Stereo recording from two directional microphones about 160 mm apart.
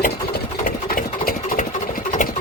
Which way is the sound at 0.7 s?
60° left (ahead or behind).